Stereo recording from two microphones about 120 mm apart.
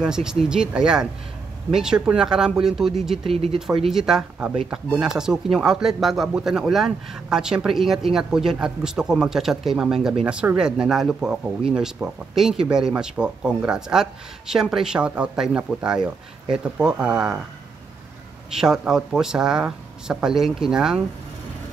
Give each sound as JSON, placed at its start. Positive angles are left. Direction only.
{"t": 0.0, "sound": "speech", "side_deg": -5}
{"t": 3.3, "sound": "speech", "side_deg": -55}
{"t": 3.8, "sound": "speech", "side_deg": -5}
{"t": 18.6, "sound": "speech", "side_deg": -5}